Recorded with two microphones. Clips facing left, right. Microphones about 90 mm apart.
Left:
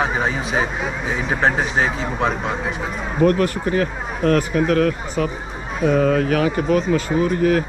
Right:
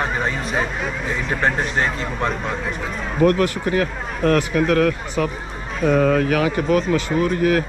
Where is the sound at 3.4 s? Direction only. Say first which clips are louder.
Even; 35° left (ahead or behind).